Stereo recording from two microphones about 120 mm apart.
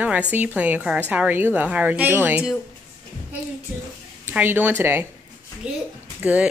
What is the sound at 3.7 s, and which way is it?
A woman's voice, 20° right (ahead or behind).